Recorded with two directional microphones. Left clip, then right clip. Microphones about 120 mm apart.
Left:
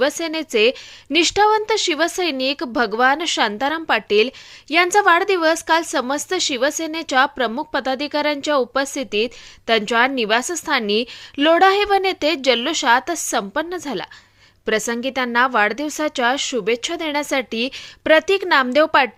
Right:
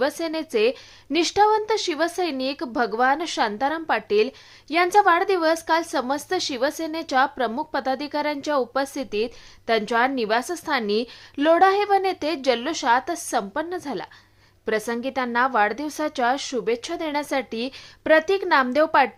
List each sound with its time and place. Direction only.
0.0 s a woman's voice: 20° left (ahead or behind)